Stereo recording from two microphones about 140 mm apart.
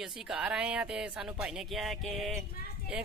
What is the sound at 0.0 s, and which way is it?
Speech, 5° right (ahead or behind).